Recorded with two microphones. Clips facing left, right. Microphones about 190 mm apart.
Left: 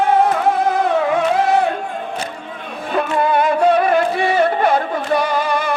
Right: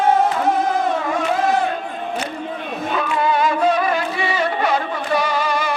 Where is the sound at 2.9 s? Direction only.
55° left (ahead or behind).